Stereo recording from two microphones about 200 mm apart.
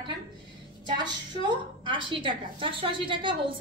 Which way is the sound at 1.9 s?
25° right (ahead or behind).